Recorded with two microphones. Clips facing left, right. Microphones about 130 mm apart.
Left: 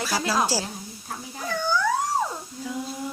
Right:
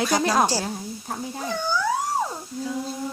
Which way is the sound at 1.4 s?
15° right (ahead or behind).